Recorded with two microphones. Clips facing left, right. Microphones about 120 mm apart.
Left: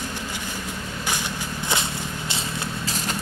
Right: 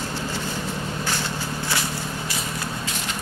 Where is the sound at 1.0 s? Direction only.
15° left (ahead or behind).